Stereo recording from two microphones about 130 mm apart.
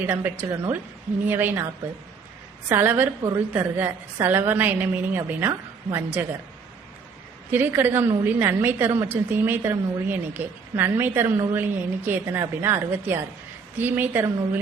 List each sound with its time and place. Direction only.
0.1 s a woman's voice: 15° right (ahead or behind)
2.6 s a woman's voice: 15° right (ahead or behind)
7.5 s a woman's voice: 15° right (ahead or behind)